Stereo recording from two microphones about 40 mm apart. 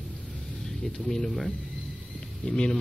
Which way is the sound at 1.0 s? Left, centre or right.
Centre.